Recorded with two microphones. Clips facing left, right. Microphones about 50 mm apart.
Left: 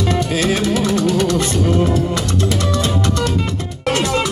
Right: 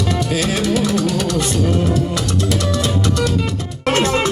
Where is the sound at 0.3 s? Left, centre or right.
Left.